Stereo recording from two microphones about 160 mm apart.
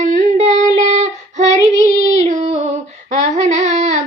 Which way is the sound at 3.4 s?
45° right (ahead or behind).